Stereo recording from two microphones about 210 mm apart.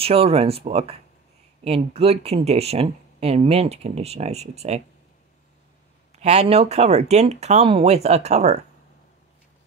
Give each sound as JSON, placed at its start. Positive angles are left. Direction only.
{"t": 0.0, "sound": "speech", "side_deg": -25}
{"t": 2.0, "sound": "speech", "side_deg": -30}
{"t": 6.1, "sound": "speech", "side_deg": -30}